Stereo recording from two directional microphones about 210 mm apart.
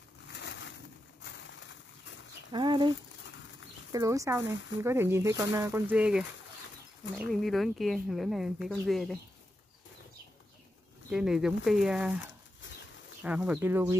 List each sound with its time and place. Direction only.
0.3 s bird: 55° left (ahead or behind)
2.5 s speech: 20° right (ahead or behind); by 9.2 s centre (ahead or behind)
11.1 s speech: 5° right (ahead or behind)
13.2 s speech: 5° right (ahead or behind)